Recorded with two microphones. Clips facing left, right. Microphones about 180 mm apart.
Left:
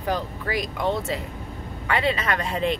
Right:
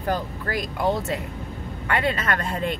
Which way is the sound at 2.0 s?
50° right (ahead or behind).